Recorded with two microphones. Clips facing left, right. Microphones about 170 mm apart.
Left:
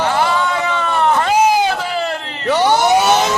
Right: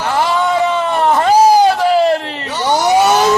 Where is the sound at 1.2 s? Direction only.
40° right (ahead or behind).